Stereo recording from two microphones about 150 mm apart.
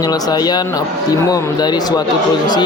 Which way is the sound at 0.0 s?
25° left (ahead or behind).